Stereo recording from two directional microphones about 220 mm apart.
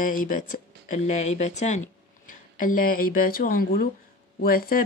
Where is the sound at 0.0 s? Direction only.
40° left (ahead or behind).